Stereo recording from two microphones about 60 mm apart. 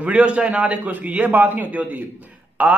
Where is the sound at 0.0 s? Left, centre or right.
Right.